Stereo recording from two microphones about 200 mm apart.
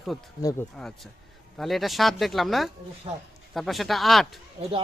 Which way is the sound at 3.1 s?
30° right (ahead or behind).